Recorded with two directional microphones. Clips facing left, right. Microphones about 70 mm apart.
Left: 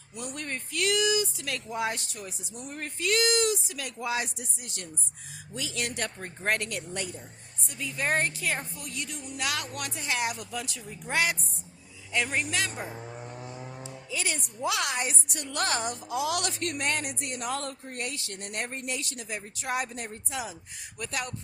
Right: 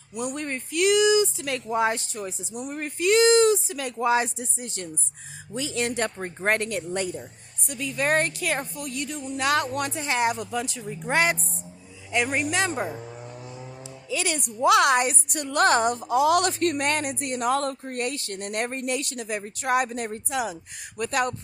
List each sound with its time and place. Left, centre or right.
0.1 s speech: centre
2.5 s speech: centre; by 7.2 s right
7.7 s a woman's voice: right
12.1 s speech: centre
13.0 s vehicle: centre
14.1 s a woman's voice: right
21.0 s a woman's voice: right